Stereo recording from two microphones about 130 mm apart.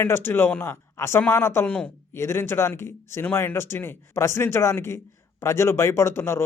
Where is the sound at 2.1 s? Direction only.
20° left (ahead or behind).